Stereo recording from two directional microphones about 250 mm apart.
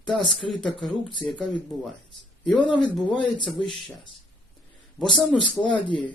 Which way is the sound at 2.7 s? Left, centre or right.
Centre.